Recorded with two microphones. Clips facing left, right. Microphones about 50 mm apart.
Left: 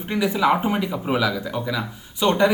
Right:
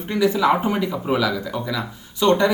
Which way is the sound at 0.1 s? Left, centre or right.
Centre.